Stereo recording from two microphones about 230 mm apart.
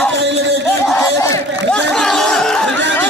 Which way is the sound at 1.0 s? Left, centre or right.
Centre.